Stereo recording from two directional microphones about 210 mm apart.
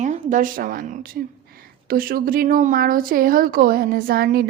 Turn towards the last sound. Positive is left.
turn(degrees=-45)  # may be behind; listen again after turning